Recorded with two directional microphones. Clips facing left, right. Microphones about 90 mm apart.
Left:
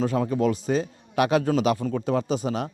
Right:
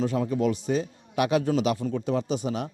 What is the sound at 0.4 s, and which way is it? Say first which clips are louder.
A man's voice: left 2 dB; 40° left (ahead or behind).